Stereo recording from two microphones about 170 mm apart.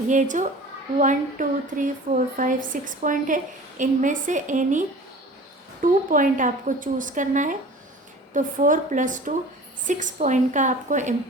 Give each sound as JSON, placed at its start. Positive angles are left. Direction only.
{"t": 0.1, "sound": "speech", "side_deg": -45}
{"t": 5.8, "sound": "speech", "side_deg": -50}